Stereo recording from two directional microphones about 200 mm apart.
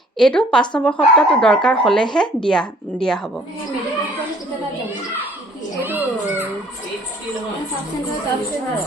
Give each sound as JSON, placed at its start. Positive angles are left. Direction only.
{"t": 0.2, "sound": "speech", "side_deg": 5}
{"t": 5.8, "sound": "a child's voice", "side_deg": -10}